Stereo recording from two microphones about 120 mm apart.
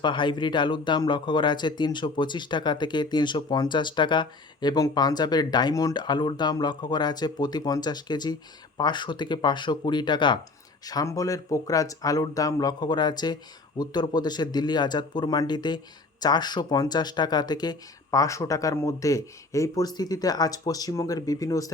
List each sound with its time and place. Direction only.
0.0 s speech: 40° left (ahead or behind)
10.8 s speech: 30° left (ahead or behind)